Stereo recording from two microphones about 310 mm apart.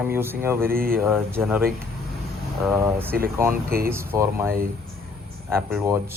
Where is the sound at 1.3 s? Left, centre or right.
Centre.